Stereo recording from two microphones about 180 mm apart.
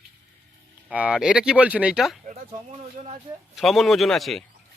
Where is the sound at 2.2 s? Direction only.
40° right (ahead or behind).